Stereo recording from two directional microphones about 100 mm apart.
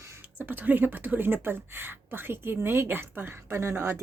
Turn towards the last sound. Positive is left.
turn(degrees=-25)  # may be behind; listen again after turning